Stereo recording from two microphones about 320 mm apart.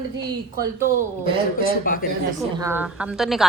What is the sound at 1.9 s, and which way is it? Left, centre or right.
Speech, left.